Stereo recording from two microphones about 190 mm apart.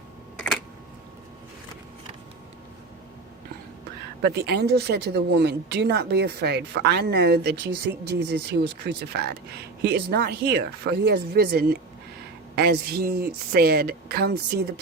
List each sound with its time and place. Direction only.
4.2 s speech: 60° right (ahead or behind)